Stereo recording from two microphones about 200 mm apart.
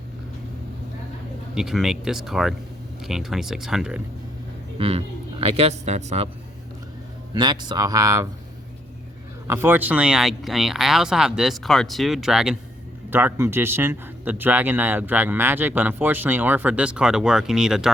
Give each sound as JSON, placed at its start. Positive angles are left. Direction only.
{"t": 1.5, "sound": "speech", "side_deg": 0}
{"t": 4.8, "sound": "a man's voice", "side_deg": -30}
{"t": 7.3, "sound": "speech", "side_deg": -20}
{"t": 9.5, "sound": "speech", "side_deg": -10}